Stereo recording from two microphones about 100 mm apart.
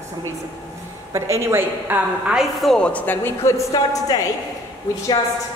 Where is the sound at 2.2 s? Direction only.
5° right (ahead or behind); by 4.3 s 35° left (ahead or behind).